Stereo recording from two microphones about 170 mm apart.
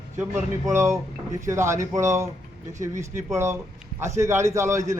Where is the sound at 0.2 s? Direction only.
15° right (ahead or behind).